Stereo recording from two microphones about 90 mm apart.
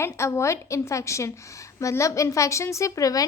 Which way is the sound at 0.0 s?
30° left (ahead or behind).